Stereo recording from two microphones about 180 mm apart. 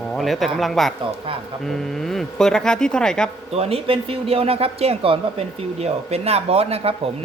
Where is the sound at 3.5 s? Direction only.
35° right (ahead or behind).